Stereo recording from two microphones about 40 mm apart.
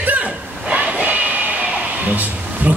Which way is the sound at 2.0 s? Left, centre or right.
Right.